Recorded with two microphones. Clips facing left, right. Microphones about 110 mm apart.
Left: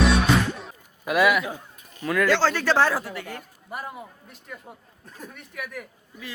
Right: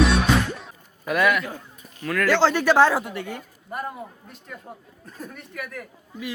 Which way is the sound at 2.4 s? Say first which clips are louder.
Right 4 dB; 15° right (ahead or behind).